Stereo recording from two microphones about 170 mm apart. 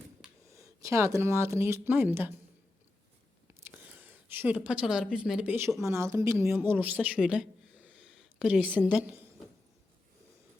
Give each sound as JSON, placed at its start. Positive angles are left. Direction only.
{"t": 0.4, "sound": "speech", "side_deg": -20}
{"t": 3.6, "sound": "a woman's voice", "side_deg": -10}